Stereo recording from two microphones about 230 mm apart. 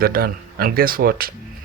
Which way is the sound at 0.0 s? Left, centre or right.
Right.